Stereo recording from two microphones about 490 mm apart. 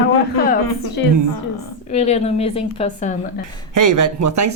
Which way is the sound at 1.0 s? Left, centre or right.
Left.